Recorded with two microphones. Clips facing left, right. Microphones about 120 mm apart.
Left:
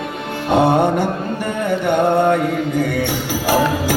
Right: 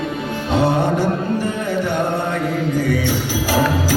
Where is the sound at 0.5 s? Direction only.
60° left (ahead or behind).